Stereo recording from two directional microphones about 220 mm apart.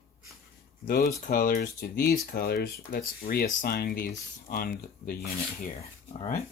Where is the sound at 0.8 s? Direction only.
40° left (ahead or behind).